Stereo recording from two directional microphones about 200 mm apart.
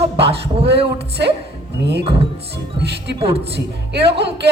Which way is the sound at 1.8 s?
55° right (ahead or behind).